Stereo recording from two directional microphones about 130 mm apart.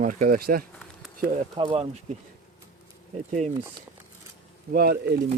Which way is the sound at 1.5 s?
45° right (ahead or behind).